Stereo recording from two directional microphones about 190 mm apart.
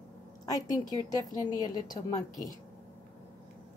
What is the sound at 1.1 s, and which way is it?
A woman's voice, 20° left (ahead or behind).